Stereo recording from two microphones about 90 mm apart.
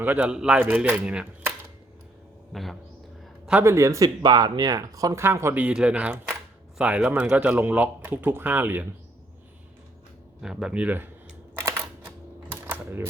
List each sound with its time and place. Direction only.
0.0 s speech: 20° right (ahead or behind)
0.3 s speech: 10° right (ahead or behind)
2.5 s speech: centre (ahead or behind)
3.6 s speech: 30° right (ahead or behind)
4.2 s speech: 50° right (ahead or behind)
5.2 s speech: 25° right (ahead or behind)
5.5 s speech: 15° right (ahead or behind)
10.4 s speech: 10° right (ahead or behind)
11.5 s a sound: 25° right (ahead or behind)
12.6 s typewriter: 25° right (ahead or behind)